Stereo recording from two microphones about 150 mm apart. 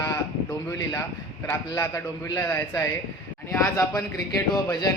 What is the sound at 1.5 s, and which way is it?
A man's voice, 20° left (ahead or behind).